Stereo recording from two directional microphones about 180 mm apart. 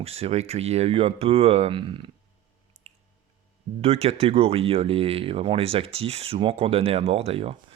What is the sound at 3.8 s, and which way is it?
Speech, 35° right (ahead or behind).